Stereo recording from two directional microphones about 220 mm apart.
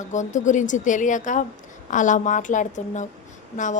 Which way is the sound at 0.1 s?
35° left (ahead or behind).